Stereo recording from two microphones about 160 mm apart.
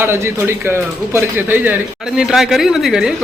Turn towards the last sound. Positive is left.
turn(degrees=-5)  # may be behind; listen again after turning